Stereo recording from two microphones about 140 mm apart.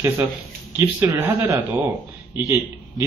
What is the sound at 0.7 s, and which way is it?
A man's voice, 20° right (ahead or behind).